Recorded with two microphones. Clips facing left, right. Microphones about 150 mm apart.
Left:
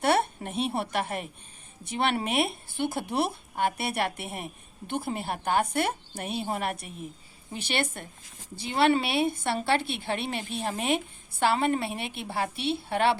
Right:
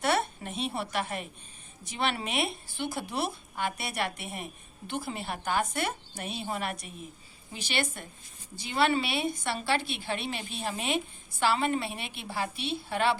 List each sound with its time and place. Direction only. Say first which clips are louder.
0.0 s a woman's voice: left 4 dB; 55° left (ahead or behind)